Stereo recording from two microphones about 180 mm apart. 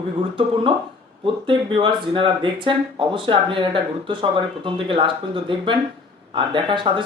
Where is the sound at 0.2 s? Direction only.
30° right (ahead or behind).